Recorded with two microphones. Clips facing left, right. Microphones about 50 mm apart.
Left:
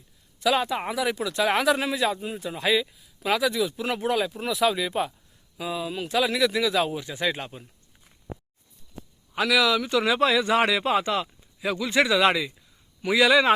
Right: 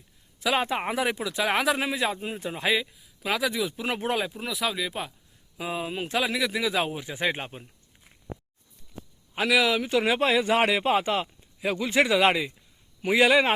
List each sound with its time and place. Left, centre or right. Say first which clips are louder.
0.3 s speech: left 2 dB; right
1.1 s speech: left 2 dB; centre
2.8 s speech: left 3 dB; centre
3.5 s speech: left 2 dB; centre
4.4 s speech: left 5 dB; centre
5.7 s a man's voice: left 2 dB; right
6.2 s speech: left 4 dB; centre
6.6 s speech: left 3 dB; centre
9.3 s a man's voice: left 1 dB; centre; by 13.5 s right